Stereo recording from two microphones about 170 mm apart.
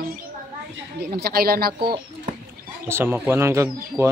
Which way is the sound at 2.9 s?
15° right (ahead or behind).